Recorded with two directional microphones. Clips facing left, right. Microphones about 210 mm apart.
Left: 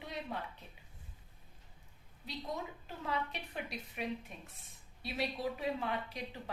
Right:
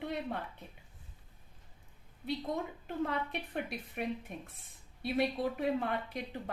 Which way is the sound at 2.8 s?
55° right (ahead or behind).